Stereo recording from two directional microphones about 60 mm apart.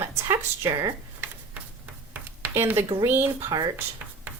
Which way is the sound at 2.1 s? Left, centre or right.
Right.